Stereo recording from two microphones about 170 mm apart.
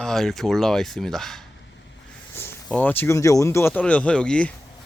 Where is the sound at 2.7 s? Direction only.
10° left (ahead or behind).